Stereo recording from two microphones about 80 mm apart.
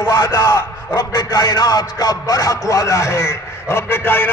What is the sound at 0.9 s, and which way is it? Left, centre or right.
A man's voice, left.